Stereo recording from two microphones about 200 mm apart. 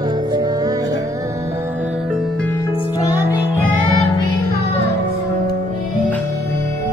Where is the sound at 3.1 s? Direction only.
20° left (ahead or behind).